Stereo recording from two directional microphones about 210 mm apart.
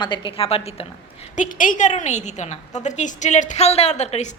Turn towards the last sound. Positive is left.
turn(degrees=30)  # may be behind; listen again after turning